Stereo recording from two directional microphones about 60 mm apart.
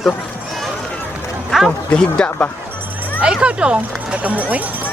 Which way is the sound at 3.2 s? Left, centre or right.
Centre.